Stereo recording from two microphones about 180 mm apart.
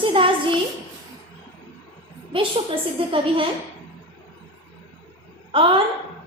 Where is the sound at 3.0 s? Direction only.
30° right (ahead or behind).